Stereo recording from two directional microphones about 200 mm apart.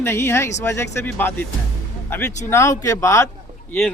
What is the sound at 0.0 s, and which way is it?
Speech, 10° left (ahead or behind).